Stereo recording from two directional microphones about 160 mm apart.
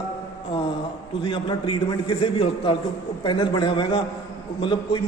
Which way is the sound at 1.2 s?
30° left (ahead or behind).